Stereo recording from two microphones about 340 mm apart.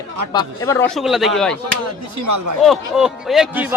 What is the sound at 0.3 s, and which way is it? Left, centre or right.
Speech, centre.